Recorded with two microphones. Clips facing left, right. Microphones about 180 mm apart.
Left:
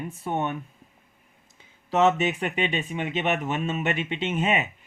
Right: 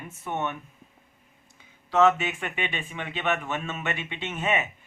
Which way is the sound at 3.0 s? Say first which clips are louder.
Left 1 dB; 20° left (ahead or behind).